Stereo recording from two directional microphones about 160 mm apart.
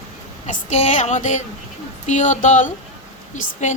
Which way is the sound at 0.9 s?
50° left (ahead or behind).